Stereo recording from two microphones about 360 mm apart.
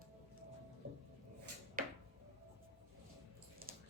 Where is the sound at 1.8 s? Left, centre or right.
Right.